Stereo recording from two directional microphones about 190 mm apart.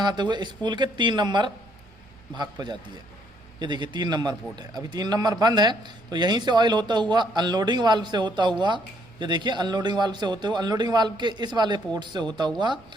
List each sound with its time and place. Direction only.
0.0 s a man's voice: 20° right (ahead or behind)